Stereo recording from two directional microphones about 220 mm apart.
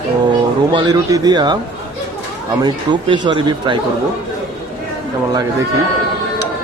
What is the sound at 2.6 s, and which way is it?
Speech, 20° right (ahead or behind).